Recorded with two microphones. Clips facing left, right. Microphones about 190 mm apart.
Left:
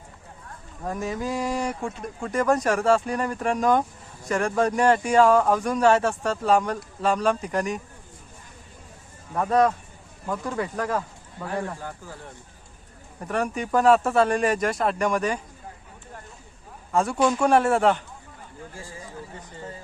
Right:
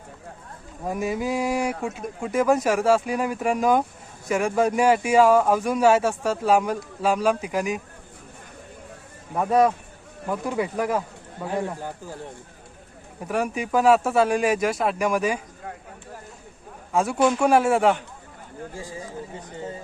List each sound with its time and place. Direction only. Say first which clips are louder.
0.9 s speech: right 3 dB; 10° right (ahead or behind)
9.3 s speech: right 1 dB; 10° right (ahead or behind)
13.1 s speech: right 1 dB; 5° right (ahead or behind)
16.9 s speech: right 1 dB; 5° right (ahead or behind)
18.7 s speech: right 5 dB; 15° right (ahead or behind)